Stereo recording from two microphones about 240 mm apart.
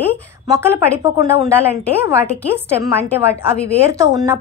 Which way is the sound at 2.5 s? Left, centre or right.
Centre.